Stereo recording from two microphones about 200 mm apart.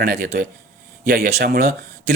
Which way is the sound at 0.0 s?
50° right (ahead or behind).